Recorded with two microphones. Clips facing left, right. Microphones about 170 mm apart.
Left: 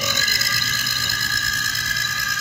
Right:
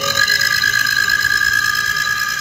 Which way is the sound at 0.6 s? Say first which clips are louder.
Right 7 dB; 90° right.